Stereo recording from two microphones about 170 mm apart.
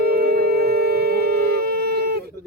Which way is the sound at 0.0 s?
65° right (ahead or behind).